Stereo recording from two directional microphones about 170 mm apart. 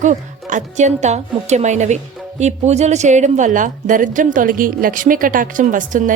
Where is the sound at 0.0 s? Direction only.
45° right (ahead or behind).